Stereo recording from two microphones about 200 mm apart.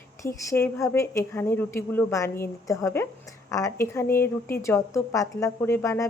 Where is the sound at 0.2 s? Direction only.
15° left (ahead or behind).